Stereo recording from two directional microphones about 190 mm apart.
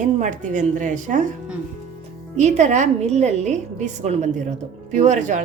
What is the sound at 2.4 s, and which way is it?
A woman's voice, 35° right (ahead or behind).